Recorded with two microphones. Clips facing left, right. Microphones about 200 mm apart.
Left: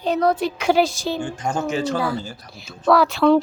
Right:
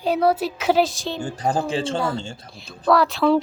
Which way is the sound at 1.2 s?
35° right (ahead or behind).